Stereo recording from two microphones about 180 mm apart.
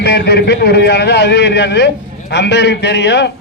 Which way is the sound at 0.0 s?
65° left (ahead or behind).